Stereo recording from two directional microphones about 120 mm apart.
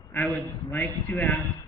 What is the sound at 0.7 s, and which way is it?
Speech, 15° left (ahead or behind).